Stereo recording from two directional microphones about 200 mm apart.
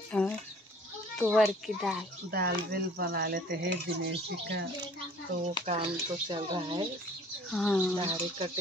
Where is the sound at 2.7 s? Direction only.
50° right (ahead or behind).